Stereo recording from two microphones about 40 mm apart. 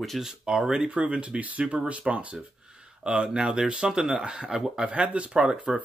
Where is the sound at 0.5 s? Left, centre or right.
Centre.